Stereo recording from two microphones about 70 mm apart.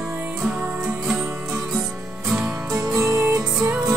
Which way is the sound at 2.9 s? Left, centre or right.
Right.